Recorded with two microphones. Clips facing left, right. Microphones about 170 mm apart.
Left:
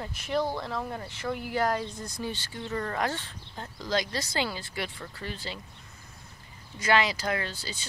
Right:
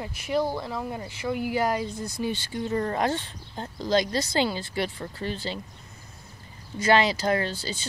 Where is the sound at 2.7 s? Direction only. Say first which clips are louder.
Right 4 dB; 25° right (ahead or behind).